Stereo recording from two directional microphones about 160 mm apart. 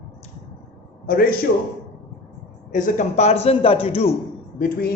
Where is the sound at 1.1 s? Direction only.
65° left (ahead or behind).